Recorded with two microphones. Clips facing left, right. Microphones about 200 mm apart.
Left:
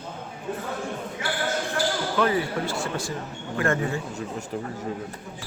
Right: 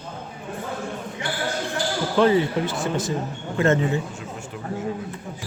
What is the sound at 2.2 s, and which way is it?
A man's voice, 25° right (ahead or behind).